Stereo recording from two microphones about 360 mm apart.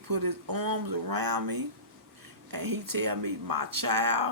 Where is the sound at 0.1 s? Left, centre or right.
Right.